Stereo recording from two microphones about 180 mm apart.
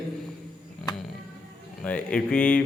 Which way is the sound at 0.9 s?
20° left (ahead or behind).